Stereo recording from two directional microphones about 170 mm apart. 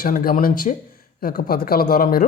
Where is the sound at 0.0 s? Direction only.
60° left (ahead or behind).